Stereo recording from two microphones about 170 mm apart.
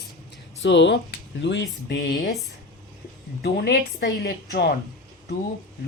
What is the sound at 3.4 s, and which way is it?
Speech, 70° left (ahead or behind).